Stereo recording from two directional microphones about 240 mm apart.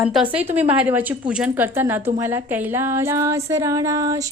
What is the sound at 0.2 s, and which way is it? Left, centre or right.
Speech, right.